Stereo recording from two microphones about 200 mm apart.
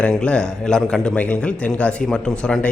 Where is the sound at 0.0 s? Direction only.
5° left (ahead or behind).